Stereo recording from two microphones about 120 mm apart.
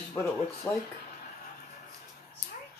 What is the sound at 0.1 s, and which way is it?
Speech, 20° left (ahead or behind).